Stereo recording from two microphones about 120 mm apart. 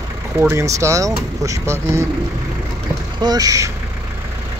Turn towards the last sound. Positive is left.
turn(degrees=-30)  # may be behind; listen again after turning